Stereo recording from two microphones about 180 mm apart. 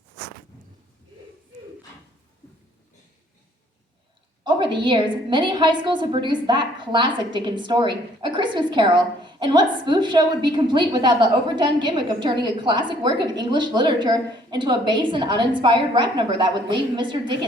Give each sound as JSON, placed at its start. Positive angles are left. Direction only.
{"t": 4.4, "sound": "a woman's voice", "side_deg": -25}